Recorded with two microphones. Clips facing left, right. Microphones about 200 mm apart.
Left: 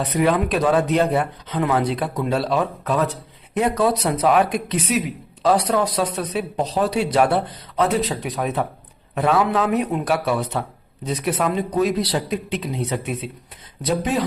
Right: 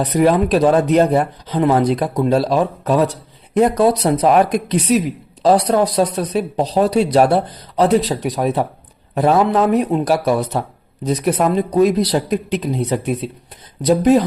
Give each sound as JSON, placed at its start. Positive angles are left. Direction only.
{"t": 0.0, "sound": "speech", "side_deg": -40}